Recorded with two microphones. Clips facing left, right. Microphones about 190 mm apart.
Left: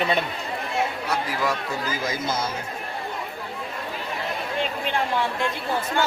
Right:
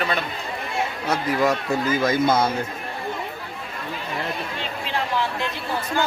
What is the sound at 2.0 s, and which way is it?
Speech, 60° right (ahead or behind).